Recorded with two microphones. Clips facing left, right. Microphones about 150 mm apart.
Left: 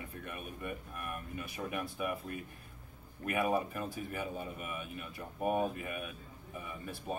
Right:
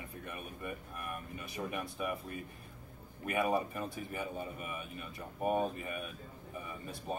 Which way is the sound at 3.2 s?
Centre (ahead or behind).